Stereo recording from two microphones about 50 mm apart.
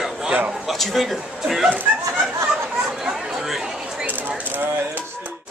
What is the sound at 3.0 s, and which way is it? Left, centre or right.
Chatter, centre.